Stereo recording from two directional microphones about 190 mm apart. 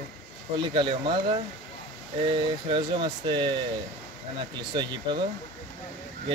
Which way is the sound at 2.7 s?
25° right (ahead or behind).